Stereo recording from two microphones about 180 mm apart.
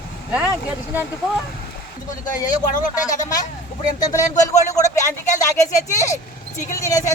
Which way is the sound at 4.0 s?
20° left (ahead or behind).